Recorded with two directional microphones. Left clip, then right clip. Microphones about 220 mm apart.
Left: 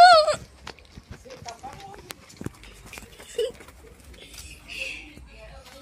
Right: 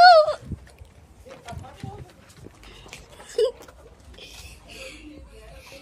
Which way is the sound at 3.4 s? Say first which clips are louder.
Right 5 dB; 25° right (ahead or behind).